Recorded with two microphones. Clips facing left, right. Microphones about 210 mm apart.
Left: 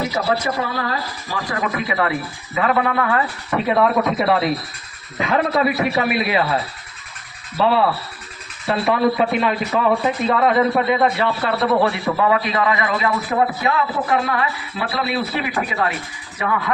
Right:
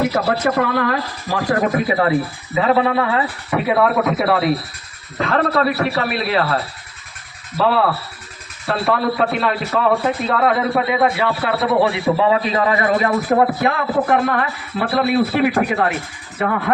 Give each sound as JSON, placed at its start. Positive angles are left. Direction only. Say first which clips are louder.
{"t": 0.0, "sound": "speech", "louder": "right 3 dB", "side_deg": -60}
{"t": 1.9, "sound": "speech", "louder": "right 5 dB", "side_deg": -35}
{"t": 3.5, "sound": "a man's voice", "louder": "right 1 dB", "side_deg": -5}
{"t": 5.1, "sound": "a man's voice", "louder": "right 1 dB", "side_deg": 10}
{"t": 8.6, "sound": "a man's voice", "louder": "left 1 dB", "side_deg": 0}
{"t": 11.8, "sound": "a man's voice", "louder": "right 2 dB", "side_deg": -20}